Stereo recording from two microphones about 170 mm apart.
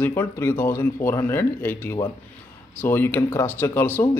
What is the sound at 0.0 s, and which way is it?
Speech, 15° left (ahead or behind).